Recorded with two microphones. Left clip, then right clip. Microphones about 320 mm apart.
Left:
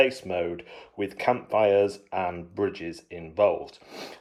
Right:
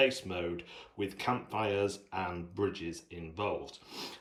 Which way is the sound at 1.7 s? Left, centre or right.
Centre.